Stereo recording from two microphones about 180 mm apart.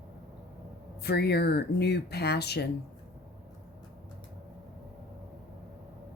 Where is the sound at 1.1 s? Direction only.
65° left (ahead or behind).